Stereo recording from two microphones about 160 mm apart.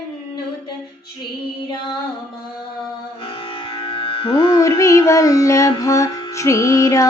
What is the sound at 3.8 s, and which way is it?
Music, 35° left (ahead or behind).